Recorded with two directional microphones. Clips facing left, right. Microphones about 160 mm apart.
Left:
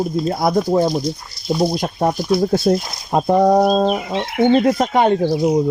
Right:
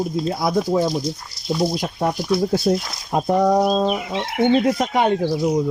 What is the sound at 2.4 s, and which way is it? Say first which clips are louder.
Speech: left 3 dB; 60° left (ahead or behind).